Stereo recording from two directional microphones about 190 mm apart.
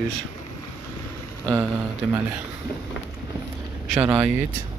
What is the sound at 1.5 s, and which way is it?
Speech, 10° right (ahead or behind).